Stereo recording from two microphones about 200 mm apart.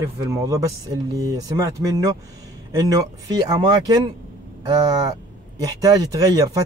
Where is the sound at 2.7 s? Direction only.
15° right (ahead or behind).